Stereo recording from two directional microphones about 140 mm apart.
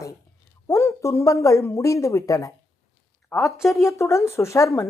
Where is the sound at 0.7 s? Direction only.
20° left (ahead or behind).